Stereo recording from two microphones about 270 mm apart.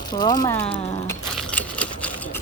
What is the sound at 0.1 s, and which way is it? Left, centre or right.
Speech, centre.